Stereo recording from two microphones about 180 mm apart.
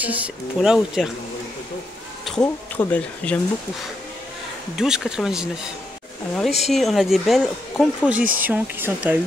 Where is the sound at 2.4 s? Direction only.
10° left (ahead or behind).